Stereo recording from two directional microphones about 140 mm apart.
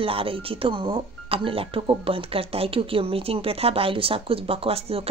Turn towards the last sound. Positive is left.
turn(degrees=-45)  # may be behind; listen again after turning